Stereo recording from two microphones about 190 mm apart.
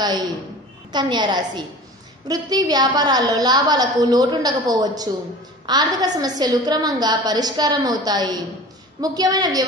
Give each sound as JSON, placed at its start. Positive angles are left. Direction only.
{"t": 0.0, "sound": "a woman's voice", "side_deg": -20}